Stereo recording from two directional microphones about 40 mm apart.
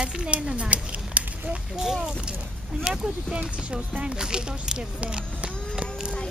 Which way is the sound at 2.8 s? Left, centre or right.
Centre.